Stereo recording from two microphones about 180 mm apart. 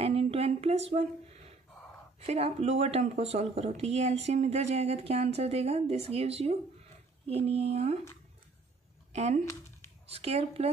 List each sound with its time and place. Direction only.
0.0 s a sound: 35° right (ahead or behind)
2.1 s speech: 35° right (ahead or behind)
9.1 s speech: 40° right (ahead or behind)